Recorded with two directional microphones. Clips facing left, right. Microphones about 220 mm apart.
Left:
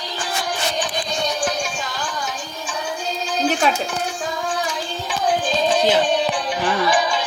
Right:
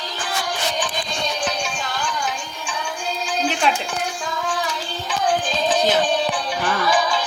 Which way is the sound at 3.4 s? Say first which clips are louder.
Left 4 dB; 40° left (ahead or behind).